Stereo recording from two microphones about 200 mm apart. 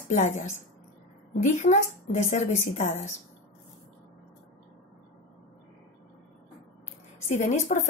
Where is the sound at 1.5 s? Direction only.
35° left (ahead or behind).